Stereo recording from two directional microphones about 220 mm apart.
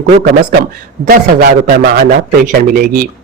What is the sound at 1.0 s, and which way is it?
Speech, 40° right (ahead or behind).